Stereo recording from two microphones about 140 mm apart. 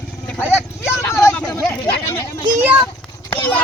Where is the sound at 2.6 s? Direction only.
15° right (ahead or behind).